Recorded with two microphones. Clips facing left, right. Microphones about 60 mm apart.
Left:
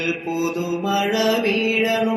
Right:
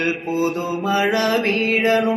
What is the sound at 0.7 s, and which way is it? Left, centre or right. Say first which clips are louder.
Music: right 1 dB; right.